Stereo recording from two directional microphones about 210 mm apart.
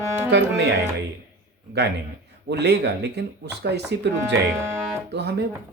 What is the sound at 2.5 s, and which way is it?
Speech, 50° right (ahead or behind).